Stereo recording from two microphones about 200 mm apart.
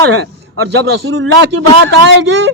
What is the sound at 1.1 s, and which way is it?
Speech, 80° right.